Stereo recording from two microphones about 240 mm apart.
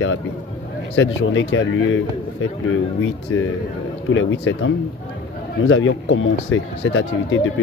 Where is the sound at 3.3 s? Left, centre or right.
Left.